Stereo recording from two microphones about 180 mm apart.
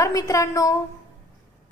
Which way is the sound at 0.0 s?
20° left (ahead or behind).